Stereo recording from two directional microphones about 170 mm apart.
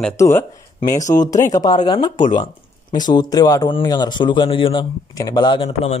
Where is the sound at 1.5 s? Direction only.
20° left (ahead or behind).